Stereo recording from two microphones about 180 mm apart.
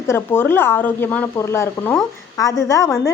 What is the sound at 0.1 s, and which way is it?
Speech, 15° left (ahead or behind).